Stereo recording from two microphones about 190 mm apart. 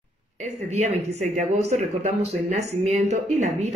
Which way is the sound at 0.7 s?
40° right (ahead or behind).